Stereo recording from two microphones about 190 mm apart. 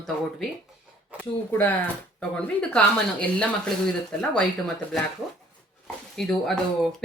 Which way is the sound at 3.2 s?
5° left (ahead or behind).